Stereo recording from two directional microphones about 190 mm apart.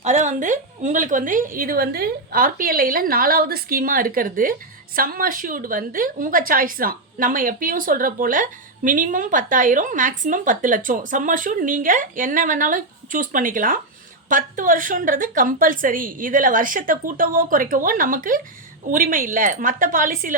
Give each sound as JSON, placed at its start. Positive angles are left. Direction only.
{"t": 0.0, "sound": "a woman's voice", "side_deg": -40}